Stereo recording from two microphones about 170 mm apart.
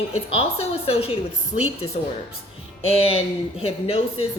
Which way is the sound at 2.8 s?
35° left (ahead or behind).